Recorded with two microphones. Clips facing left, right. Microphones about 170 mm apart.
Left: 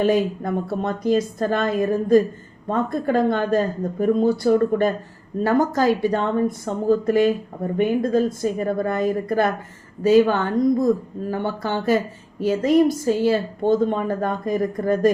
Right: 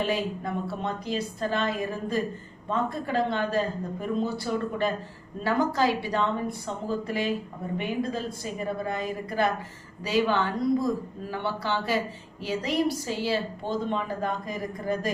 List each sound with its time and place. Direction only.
0.0 s speech: 45° left (ahead or behind)